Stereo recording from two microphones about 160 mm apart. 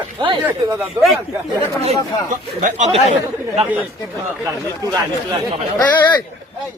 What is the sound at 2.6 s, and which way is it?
Speech, 50° right (ahead or behind).